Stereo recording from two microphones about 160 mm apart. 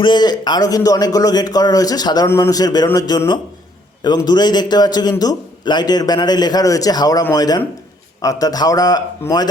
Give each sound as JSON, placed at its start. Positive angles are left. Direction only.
{"t": 0.0, "sound": "a man's voice", "side_deg": 25}